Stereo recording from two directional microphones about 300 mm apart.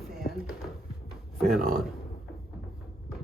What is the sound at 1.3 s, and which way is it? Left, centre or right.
Speech, centre.